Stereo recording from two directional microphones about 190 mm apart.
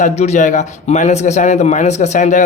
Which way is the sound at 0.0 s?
40° left (ahead or behind).